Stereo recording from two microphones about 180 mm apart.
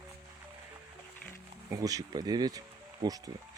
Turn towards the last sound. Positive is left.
turn(degrees=-20)  # may be behind; listen again after turning